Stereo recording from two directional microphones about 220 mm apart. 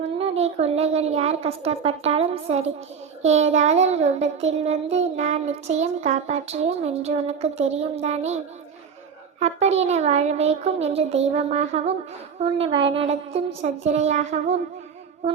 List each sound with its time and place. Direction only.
0.0 s child singing: 30° right (ahead or behind)
9.4 s child singing: 30° right (ahead or behind)